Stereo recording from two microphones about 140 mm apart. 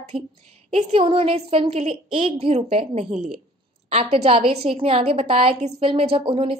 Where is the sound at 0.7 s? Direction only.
40° right (ahead or behind).